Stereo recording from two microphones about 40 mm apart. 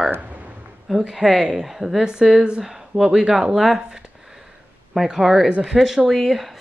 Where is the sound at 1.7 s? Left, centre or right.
Centre.